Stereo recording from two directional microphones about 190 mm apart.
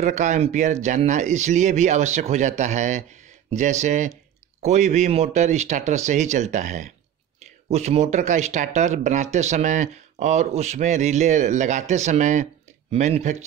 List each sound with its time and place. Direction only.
0.0 s speech: 40° right (ahead or behind)